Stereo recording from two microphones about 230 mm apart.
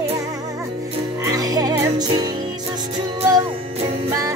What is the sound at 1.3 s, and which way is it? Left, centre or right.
Music, centre.